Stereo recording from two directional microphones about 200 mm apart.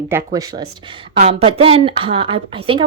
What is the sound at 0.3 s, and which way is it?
Speech, 20° right (ahead or behind).